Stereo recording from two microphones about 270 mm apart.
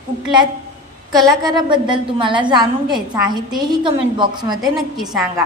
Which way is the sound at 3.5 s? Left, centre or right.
Centre.